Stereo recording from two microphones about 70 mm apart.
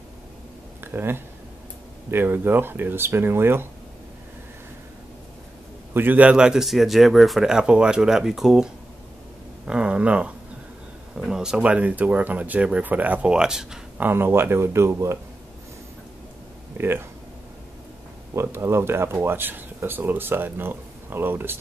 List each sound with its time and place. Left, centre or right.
0.7 s a sound: right
2.0 s speech: right
5.9 s speech: right; by 8.6 s centre
9.7 s speech: centre
11.1 s speech: centre; by 13.3 s right
13.3 s speech: centre
13.9 s speech: right
16.7 s speech: right
18.3 s speech: right